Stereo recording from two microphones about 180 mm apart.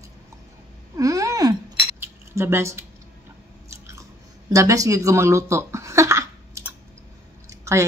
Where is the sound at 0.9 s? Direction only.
20° right (ahead or behind).